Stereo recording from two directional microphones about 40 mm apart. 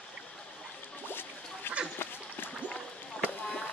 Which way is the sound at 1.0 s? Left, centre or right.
Left.